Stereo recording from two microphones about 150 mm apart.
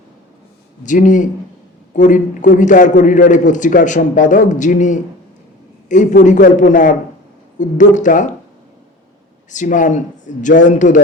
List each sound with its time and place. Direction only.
0.9 s a man's voice: 60° left (ahead or behind)
9.5 s a man's voice: 55° left (ahead or behind)